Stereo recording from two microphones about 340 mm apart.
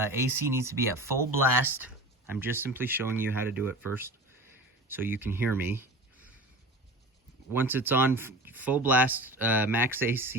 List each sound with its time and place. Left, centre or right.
0.0 s speech: centre
7.5 s speech: centre